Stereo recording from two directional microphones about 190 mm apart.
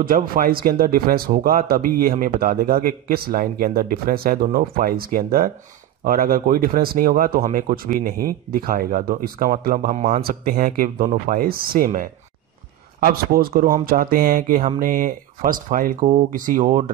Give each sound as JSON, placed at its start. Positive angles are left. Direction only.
{"t": 0.0, "sound": "speech", "side_deg": -50}